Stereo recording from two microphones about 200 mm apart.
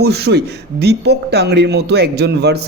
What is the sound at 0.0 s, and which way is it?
Speech, 55° right (ahead or behind).